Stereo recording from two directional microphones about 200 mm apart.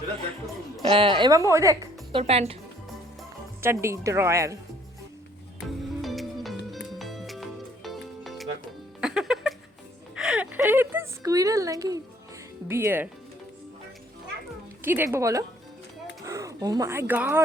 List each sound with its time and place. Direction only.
0.8 s a woman's voice: 25° right (ahead or behind)
2.2 s speech: 30° right (ahead or behind)
3.6 s speech: 10° right (ahead or behind)
5.5 s music: centre (ahead or behind)
10.2 s a sound: 5° right (ahead or behind)
12.6 s speech: 10° right (ahead or behind)
14.8 s speech: 10° right (ahead or behind)